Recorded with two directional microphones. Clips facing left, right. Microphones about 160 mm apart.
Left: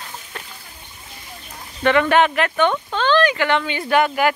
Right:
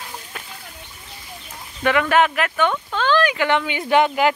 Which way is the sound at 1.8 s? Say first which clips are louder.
Left 2 dB; 5° right (ahead or behind).